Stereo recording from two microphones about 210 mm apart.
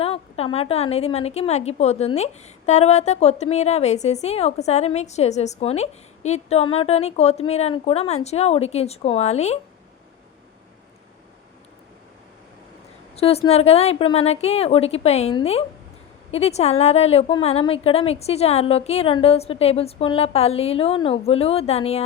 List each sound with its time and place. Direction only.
0.0 s a woman's voice: 25° left (ahead or behind)
13.1 s a woman's voice: 30° left (ahead or behind)